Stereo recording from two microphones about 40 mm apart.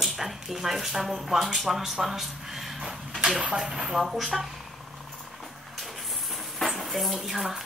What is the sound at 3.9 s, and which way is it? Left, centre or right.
Speech, centre.